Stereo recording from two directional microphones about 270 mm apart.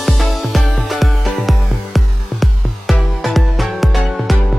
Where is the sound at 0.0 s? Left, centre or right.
Centre.